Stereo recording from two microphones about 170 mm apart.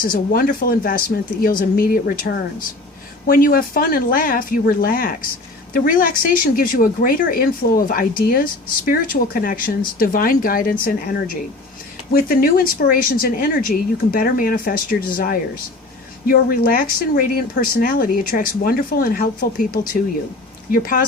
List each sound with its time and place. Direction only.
0.0 s speech: 55° left (ahead or behind)